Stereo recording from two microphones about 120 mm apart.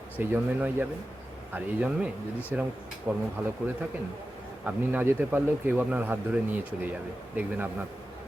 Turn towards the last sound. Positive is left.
turn(degrees=-15)  # may be behind; listen again after turning